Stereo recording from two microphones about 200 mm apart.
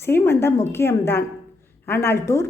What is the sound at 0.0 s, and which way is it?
A woman's voice, 10° left (ahead or behind).